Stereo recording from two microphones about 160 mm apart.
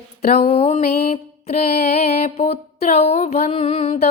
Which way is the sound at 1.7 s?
45° left (ahead or behind).